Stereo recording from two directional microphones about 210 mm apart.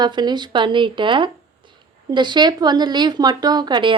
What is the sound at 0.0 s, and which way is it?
Speech, 20° right (ahead or behind).